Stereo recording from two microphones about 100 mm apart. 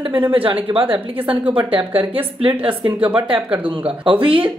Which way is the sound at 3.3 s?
15° right (ahead or behind).